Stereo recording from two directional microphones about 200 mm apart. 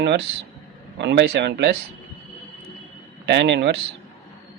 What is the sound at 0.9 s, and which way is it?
Speech, 60° right (ahead or behind).